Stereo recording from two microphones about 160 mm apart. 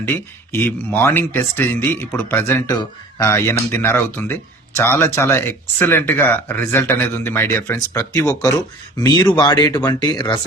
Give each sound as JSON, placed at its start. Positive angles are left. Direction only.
{"t": 0.0, "sound": "speech", "side_deg": 15}